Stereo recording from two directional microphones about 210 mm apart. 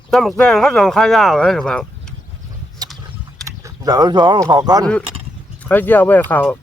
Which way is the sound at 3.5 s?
15° right (ahead or behind).